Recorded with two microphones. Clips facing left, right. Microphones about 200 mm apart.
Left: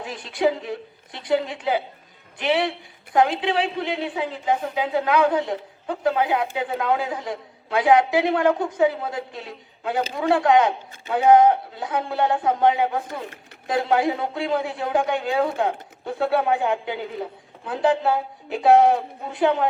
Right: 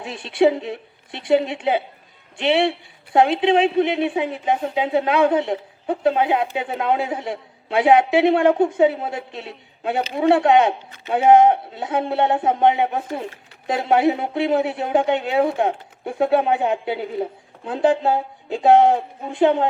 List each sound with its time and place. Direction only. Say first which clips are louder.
0.0 s a woman's voice: right 5 dB; 25° right (ahead or behind)